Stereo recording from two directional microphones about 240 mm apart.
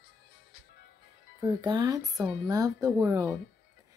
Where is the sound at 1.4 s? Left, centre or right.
Centre.